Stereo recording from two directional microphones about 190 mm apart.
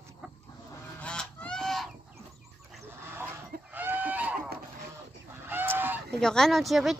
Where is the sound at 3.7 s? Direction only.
10° right (ahead or behind).